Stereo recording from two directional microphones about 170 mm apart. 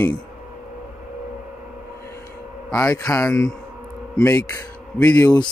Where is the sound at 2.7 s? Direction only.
20° left (ahead or behind).